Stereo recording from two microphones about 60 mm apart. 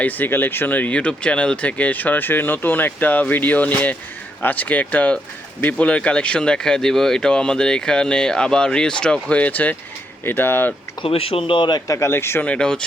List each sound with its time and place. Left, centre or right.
0.0 s speech: left; by 9.3 s centre
9.3 s speech: left
11.9 s speech: left
12.5 s speech: centre